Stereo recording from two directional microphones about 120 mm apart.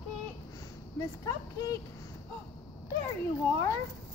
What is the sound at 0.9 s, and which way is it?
Speech, 25° left (ahead or behind).